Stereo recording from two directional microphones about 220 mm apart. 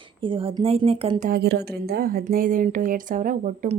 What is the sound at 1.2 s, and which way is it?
Speech, 45° right (ahead or behind).